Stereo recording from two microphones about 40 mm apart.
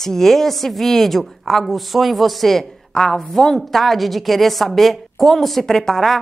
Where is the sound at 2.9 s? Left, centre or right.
Centre.